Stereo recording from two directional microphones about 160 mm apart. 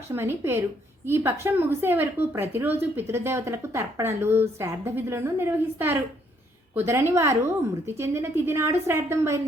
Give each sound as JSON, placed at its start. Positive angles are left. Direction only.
{"t": 0.1, "sound": "a woman's voice", "side_deg": -15}